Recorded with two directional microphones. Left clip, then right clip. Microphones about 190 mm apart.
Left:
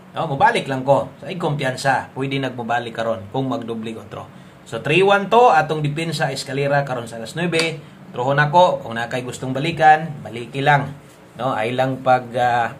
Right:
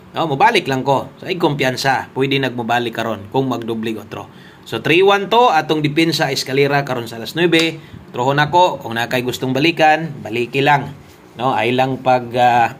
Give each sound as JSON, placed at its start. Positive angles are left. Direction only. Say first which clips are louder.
{"t": 0.1, "sound": "speech", "louder": "right 3 dB", "side_deg": -30}